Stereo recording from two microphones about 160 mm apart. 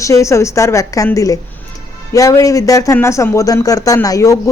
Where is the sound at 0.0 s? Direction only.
20° left (ahead or behind).